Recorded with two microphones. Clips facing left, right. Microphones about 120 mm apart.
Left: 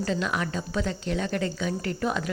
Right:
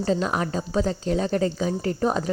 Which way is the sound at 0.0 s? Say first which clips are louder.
Right 4 dB; 35° right (ahead or behind).